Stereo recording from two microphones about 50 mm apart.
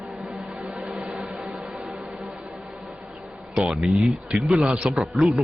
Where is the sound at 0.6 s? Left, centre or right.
Centre.